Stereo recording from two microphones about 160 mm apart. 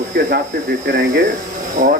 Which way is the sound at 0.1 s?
65° right (ahead or behind).